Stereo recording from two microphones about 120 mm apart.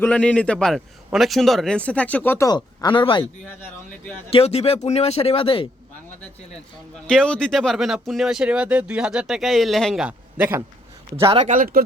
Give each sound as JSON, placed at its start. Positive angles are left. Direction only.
{"t": 0.0, "sound": "a man's voice", "side_deg": 10}
{"t": 2.8, "sound": "speech", "side_deg": 45}
{"t": 4.3, "sound": "speech", "side_deg": 55}
{"t": 7.1, "sound": "speech", "side_deg": 5}
{"t": 11.3, "sound": "speech", "side_deg": -75}